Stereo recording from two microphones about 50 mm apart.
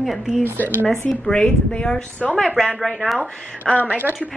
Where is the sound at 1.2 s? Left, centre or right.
Centre.